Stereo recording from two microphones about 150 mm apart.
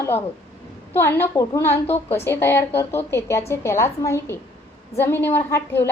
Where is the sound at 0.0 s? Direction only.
15° left (ahead or behind).